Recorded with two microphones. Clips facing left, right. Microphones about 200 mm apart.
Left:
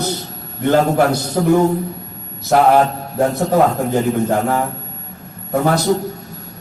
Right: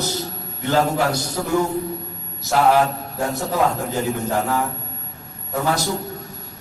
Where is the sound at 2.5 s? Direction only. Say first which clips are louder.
Left 6 dB; 55° left (ahead or behind).